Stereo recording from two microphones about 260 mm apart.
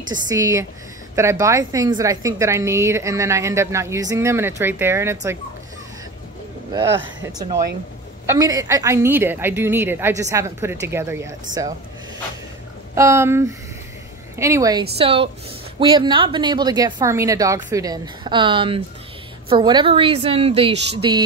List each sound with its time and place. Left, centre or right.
0.1 s a woman's voice: centre
7.3 s a woman's voice: centre
12.9 s a woman's voice: centre